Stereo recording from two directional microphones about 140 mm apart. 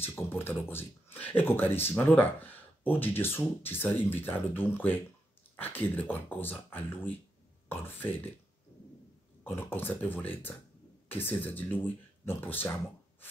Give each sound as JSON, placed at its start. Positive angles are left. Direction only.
{"t": 0.0, "sound": "speech", "side_deg": 15}
{"t": 9.4, "sound": "speech", "side_deg": 15}